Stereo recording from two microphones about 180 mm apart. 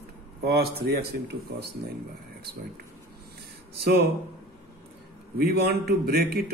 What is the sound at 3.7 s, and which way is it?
Speech, 60° right (ahead or behind).